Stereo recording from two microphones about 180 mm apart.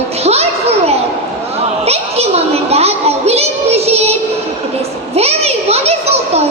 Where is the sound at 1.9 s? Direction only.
35° right (ahead or behind).